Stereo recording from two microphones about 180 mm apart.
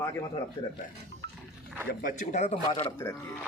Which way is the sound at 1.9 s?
55° left (ahead or behind).